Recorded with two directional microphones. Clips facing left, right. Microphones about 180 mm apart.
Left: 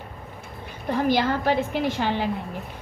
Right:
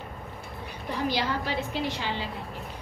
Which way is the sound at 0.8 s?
50° left (ahead or behind).